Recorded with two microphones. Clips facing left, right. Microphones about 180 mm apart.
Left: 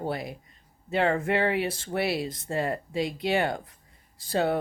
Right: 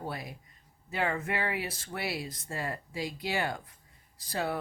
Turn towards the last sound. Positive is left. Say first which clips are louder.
# left 7 dB
turn(degrees=25)  # may be behind; listen again after turning